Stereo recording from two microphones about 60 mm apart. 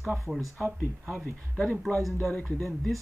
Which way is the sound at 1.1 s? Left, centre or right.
Centre.